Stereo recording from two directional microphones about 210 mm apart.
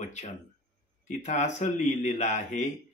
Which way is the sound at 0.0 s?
35° left (ahead or behind).